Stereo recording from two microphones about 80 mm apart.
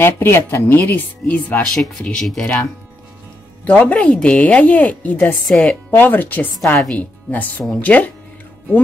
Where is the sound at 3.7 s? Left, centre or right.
Centre.